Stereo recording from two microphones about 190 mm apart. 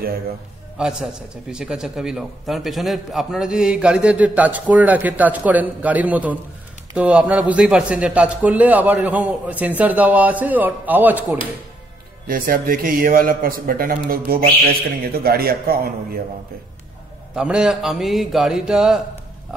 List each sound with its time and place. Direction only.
0.7 s a man's voice: 5° right (ahead or behind)
12.3 s a man's voice: 50° right (ahead or behind)
17.4 s speech: 5° right (ahead or behind)